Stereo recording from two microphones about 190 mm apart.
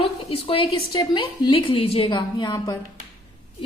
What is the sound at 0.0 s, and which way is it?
A woman's voice, 30° left (ahead or behind).